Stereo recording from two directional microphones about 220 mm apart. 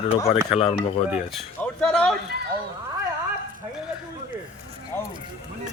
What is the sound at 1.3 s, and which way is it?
Speech, 5° left (ahead or behind).